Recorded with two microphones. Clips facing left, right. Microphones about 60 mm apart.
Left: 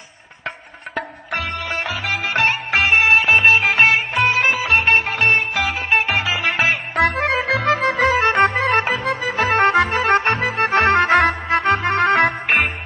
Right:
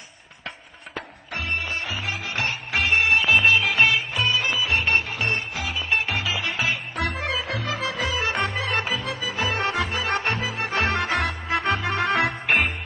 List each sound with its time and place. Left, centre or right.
2.3 s music: left
3.4 s music: left
3.7 s music: left
5.9 s music: left